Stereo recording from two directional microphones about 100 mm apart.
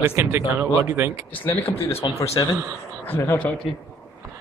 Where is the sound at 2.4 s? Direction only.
50° left (ahead or behind).